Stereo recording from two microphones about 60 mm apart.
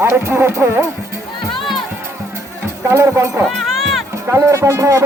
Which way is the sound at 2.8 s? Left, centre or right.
Right.